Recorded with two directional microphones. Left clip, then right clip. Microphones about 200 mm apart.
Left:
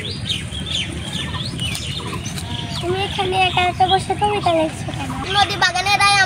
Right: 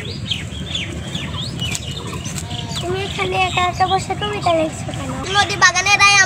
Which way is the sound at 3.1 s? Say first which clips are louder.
Even; 20° right (ahead or behind).